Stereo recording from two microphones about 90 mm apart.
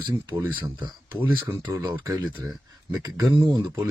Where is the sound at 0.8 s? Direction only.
60° right (ahead or behind).